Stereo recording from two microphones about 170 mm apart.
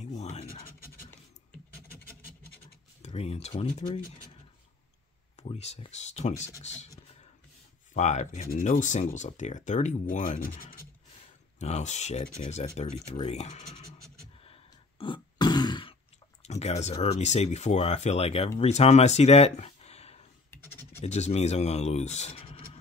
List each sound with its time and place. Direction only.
0.0 s scratch: 40° left (ahead or behind)
3.0 s speech: 40° left (ahead or behind)
5.4 s speech: 40° left (ahead or behind)
7.9 s speech: 45° left (ahead or behind)
11.6 s speech: 40° left (ahead or behind)
14.4 s throat clearing: 30° left (ahead or behind)
16.4 s speech: 40° left (ahead or behind)
20.5 s scratch: 15° left (ahead or behind)
21.0 s speech: 40° left (ahead or behind)